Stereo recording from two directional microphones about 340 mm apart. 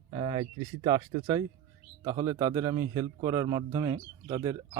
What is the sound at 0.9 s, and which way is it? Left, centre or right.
A man's voice, centre.